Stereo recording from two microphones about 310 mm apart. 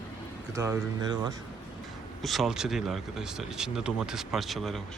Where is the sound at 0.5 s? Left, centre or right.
Centre.